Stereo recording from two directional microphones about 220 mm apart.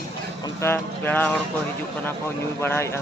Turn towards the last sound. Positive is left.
turn(degrees=10)  # may be behind; listen again after turning